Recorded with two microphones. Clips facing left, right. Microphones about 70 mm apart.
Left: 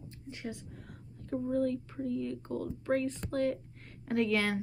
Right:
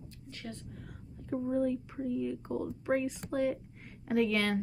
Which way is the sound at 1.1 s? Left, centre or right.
Centre.